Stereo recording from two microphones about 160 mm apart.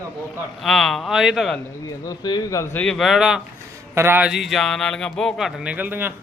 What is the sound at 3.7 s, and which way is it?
A man's voice, 15° right (ahead or behind).